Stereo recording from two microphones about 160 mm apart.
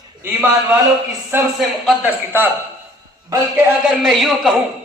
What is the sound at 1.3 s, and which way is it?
A man's voice, 15° right (ahead or behind).